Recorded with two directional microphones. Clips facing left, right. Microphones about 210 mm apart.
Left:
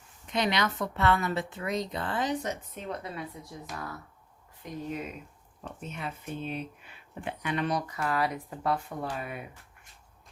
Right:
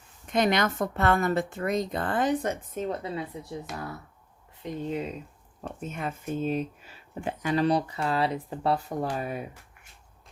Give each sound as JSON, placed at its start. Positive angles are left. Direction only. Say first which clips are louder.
{"t": 0.3, "sound": "speech", "louder": "right 4 dB", "side_deg": -50}
{"t": 2.9, "sound": "speech", "louder": "right 5 dB", "side_deg": -30}
{"t": 4.6, "sound": "speech", "louder": "right 5 dB", "side_deg": -25}
{"t": 5.8, "sound": "speech", "louder": "right 5 dB", "side_deg": -45}